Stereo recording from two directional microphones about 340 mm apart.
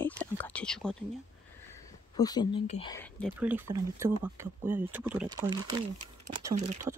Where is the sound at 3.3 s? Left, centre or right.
Centre.